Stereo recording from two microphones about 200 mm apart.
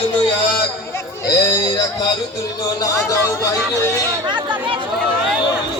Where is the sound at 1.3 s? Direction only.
20° left (ahead or behind).